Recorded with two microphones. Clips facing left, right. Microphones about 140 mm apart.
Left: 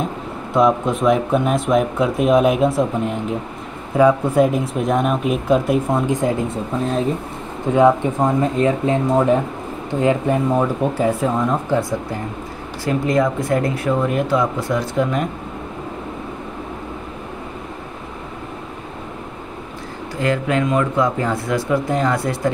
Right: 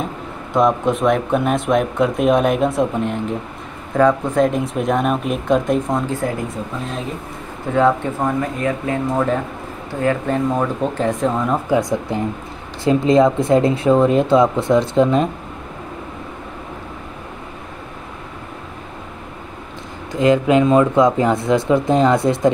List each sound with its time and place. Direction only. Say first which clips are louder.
0.5 s speech: even; centre (ahead or behind)
6.0 s speech: left 3 dB; 20° left (ahead or behind)
7.7 s speech: left 2 dB; 15° left (ahead or behind)
11.7 s speech: right 2 dB; 20° right (ahead or behind)
20.2 s speech: right 6 dB; 20° right (ahead or behind)